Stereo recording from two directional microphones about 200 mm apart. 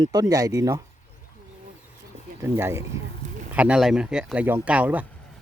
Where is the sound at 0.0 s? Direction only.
20° right (ahead or behind).